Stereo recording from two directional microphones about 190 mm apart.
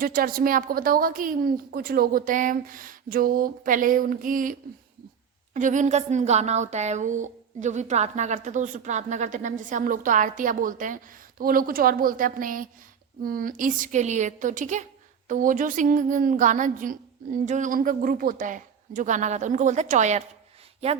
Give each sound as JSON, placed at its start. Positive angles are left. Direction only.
{"t": 0.0, "sound": "speech", "side_deg": -50}
{"t": 5.5, "sound": "a woman's voice", "side_deg": -40}